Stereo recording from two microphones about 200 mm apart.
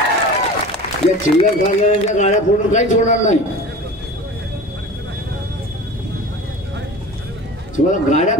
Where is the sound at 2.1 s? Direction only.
35° left (ahead or behind).